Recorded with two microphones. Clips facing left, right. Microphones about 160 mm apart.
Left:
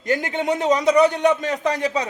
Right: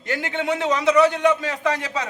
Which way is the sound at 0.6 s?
45° left (ahead or behind).